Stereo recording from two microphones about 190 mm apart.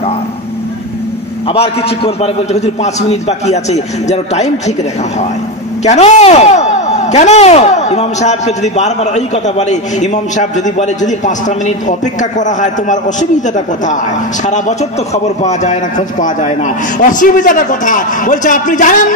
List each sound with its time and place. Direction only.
1.5 s speech: 30° left (ahead or behind)
5.9 s speech: 35° left (ahead or behind)
14.4 s a man's voice: 40° left (ahead or behind)